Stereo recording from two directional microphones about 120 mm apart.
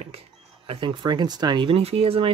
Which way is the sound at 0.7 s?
45° right (ahead or behind).